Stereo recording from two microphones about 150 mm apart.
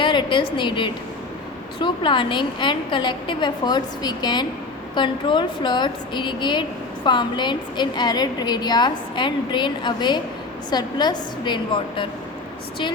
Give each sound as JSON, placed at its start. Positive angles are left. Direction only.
{"t": 0.0, "sound": "a woman's voice", "side_deg": 30}